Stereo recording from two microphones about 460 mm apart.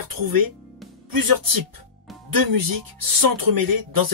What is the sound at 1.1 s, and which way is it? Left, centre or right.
Speech, right.